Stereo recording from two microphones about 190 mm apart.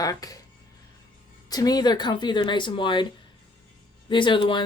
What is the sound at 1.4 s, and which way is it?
Speech, 20° left (ahead or behind).